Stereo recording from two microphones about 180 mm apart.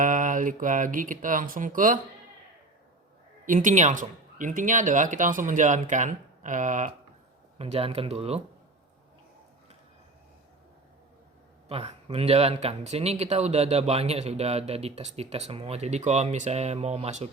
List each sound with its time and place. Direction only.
0.0 s speech: 45° right (ahead or behind)
3.4 s speech: 45° right (ahead or behind)
7.6 s speech: 30° right (ahead or behind)
11.7 s speech: 30° right (ahead or behind)